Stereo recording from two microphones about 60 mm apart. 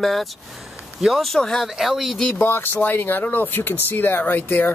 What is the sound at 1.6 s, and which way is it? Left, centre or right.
Speech, centre.